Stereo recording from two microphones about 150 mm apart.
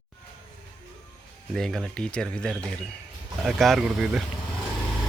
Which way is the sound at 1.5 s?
5° left (ahead or behind).